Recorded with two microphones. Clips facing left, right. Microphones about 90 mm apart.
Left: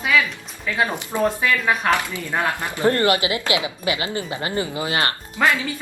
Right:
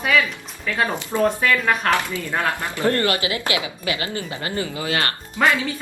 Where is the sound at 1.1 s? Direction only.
15° left (ahead or behind).